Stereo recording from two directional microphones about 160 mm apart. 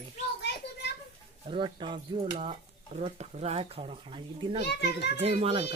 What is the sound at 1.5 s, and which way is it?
Speech, 30° right (ahead or behind).